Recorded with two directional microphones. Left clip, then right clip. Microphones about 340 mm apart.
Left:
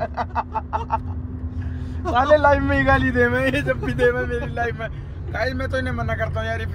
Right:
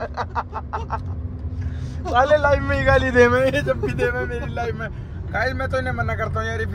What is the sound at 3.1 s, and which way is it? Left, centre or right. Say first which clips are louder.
Speech: right 4 dB; right.